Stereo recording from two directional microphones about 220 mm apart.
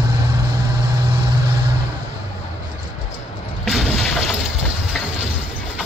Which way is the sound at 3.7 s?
Centre (ahead or behind).